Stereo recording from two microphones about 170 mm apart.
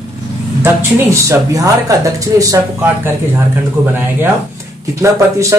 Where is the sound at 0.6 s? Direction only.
15° right (ahead or behind).